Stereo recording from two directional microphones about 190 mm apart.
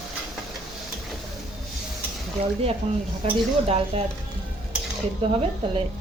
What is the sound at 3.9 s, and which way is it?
Speech, 30° right (ahead or behind).